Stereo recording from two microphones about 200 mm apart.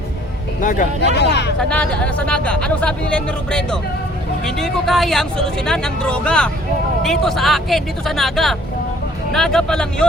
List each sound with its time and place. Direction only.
0.6 s speech: 40° left (ahead or behind)
1.1 s speech: 60° left (ahead or behind)
1.5 s speech: 5° left (ahead or behind)